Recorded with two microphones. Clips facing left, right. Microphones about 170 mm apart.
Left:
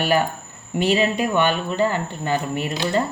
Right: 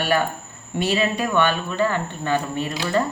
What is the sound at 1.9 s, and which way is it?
Speech, 15° left (ahead or behind).